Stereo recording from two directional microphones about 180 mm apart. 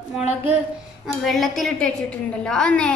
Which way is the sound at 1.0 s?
Centre (ahead or behind).